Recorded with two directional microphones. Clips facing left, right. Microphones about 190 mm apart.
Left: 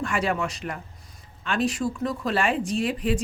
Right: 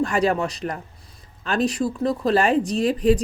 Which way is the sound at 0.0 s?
35° right (ahead or behind).